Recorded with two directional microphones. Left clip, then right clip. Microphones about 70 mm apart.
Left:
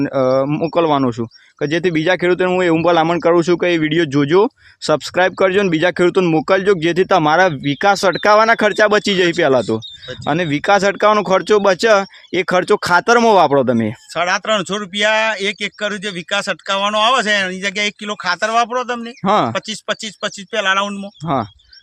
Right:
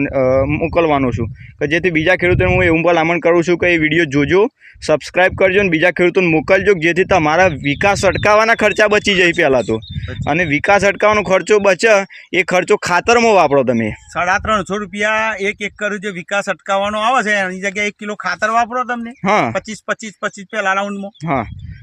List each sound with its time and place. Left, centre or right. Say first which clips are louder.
0.1 s speech: right 1 dB; centre
6.4 s speech: right 2 dB; centre
10.2 s speech: right 2 dB; centre; by 13.9 s left
14.2 s speech: right 1 dB; left
19.2 s speech: even; centre
19.5 s speech: right 1 dB; left